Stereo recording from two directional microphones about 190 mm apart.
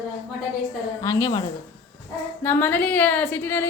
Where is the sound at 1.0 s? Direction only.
15° left (ahead or behind).